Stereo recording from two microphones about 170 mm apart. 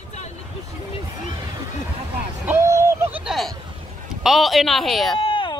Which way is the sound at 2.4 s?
15° right (ahead or behind).